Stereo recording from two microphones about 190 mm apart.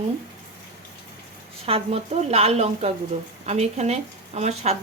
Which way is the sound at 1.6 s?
30° right (ahead or behind).